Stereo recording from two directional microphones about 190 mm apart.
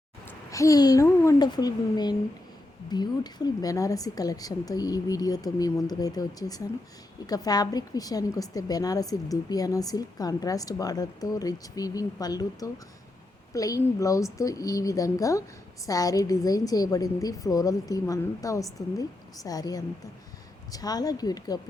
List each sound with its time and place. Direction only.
0.3 s a woman's voice: 15° left (ahead or behind)